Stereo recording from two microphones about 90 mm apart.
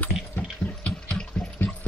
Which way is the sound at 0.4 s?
15° left (ahead or behind).